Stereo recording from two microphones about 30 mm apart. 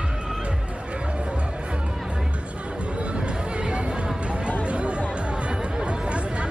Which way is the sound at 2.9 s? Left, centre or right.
Right.